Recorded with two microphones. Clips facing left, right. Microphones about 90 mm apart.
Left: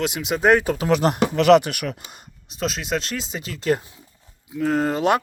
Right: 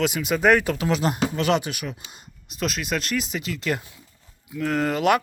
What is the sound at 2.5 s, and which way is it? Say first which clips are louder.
Speech: left 2 dB; 30° left (ahead or behind).